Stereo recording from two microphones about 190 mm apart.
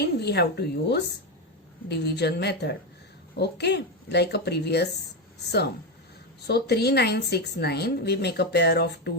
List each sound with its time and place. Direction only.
0.0 s a woman's voice: 60° left (ahead or behind)